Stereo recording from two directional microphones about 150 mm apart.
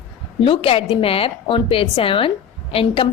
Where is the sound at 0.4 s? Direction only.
40° left (ahead or behind).